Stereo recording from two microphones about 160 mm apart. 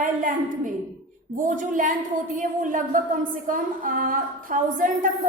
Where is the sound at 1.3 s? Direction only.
55° right (ahead or behind).